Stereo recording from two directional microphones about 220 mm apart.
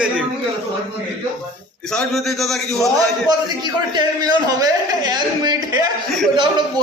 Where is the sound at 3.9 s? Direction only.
20° right (ahead or behind).